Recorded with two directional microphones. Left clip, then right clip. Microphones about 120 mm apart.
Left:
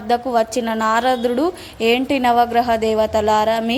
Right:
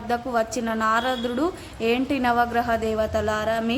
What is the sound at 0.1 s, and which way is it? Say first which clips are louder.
A woman's voice: left 7 dB; 35° left (ahead or behind).